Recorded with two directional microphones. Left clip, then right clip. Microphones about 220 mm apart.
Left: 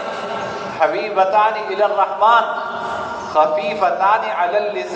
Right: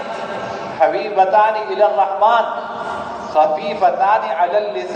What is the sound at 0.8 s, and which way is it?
A man's voice, 25° left (ahead or behind).